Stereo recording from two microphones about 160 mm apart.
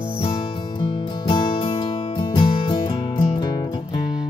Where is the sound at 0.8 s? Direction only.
30° left (ahead or behind).